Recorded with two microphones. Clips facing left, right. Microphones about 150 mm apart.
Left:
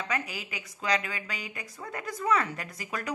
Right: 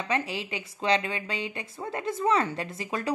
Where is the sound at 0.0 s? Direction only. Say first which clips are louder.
Right 4 dB; 30° right (ahead or behind).